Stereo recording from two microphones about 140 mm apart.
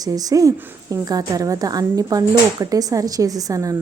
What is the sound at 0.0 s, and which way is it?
A woman's voice, 25° right (ahead or behind).